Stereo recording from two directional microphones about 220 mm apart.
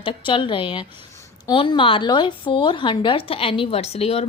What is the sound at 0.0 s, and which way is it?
A woman's voice, 20° left (ahead or behind).